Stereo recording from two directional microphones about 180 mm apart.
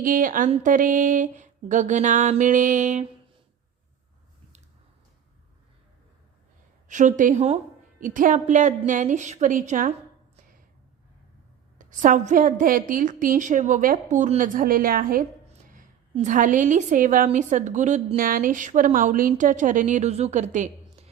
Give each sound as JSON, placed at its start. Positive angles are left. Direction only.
{"t": 0.0, "sound": "a woman's voice", "side_deg": -50}
{"t": 6.8, "sound": "a woman's voice", "side_deg": -45}
{"t": 11.8, "sound": "a woman's voice", "side_deg": -45}